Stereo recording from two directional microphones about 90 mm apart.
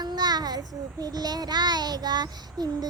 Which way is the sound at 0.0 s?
50° right (ahead or behind).